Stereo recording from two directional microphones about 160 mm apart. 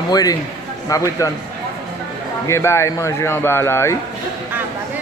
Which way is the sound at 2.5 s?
15° left (ahead or behind).